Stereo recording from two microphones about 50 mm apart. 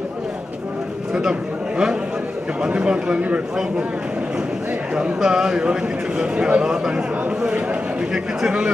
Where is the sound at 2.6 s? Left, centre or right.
Right.